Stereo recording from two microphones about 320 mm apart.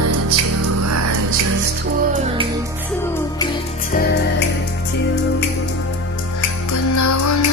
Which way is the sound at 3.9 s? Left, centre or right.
Left.